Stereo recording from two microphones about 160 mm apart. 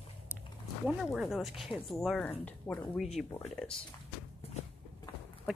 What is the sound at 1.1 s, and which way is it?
Speech, centre (ahead or behind).